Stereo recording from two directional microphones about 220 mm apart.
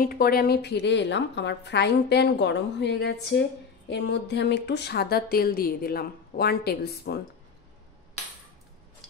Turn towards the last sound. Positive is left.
turn(degrees=45)  # may be behind; listen again after turning